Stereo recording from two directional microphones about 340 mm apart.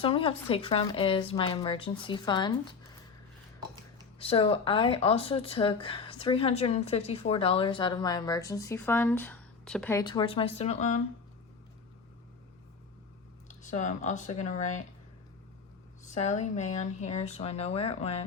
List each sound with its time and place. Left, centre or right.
0.0 s speech: centre
4.2 s speech: centre
13.5 s speech: left
16.0 s speech: left